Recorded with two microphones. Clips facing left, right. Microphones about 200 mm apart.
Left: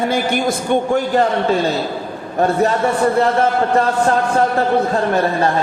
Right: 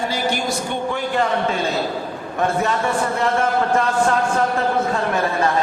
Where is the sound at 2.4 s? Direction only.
35° left (ahead or behind).